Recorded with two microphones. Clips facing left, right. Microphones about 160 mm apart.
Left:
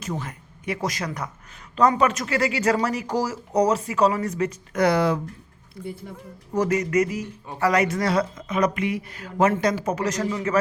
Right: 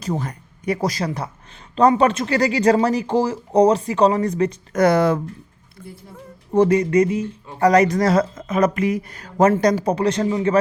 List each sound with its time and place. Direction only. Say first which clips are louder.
0.0 s speech: right 6 dB; 35° right (ahead or behind)
4.8 s speech: right 4 dB; 45° right (ahead or behind)
6.5 s speech: right 6 dB; 30° right (ahead or behind)
7.6 s speech: right 6 dB; 40° right (ahead or behind); by 10.6 s 25° right (ahead or behind)